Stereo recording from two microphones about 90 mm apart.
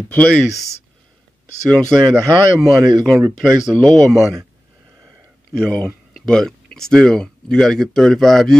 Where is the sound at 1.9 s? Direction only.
5° right (ahead or behind).